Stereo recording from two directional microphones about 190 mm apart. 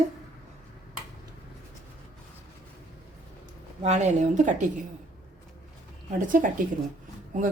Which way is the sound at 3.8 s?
40° right (ahead or behind).